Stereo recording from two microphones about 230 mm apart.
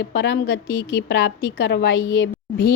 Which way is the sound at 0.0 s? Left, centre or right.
Left.